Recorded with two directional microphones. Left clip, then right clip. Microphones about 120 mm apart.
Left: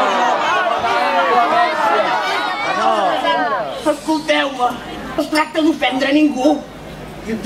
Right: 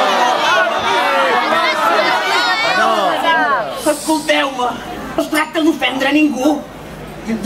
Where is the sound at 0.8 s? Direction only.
45° right (ahead or behind).